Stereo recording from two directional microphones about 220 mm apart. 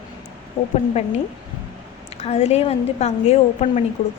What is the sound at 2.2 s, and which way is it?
A woman's voice, 30° left (ahead or behind).